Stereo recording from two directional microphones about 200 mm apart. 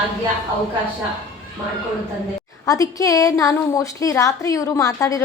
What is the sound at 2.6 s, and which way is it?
A woman's voice, 15° left (ahead or behind).